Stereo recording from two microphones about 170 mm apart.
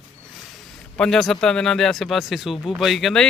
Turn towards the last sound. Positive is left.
turn(degrees=0)  # may be behind; listen again after turning